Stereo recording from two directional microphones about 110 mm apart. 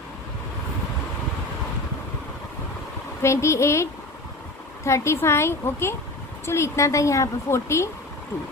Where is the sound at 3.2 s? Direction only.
25° left (ahead or behind).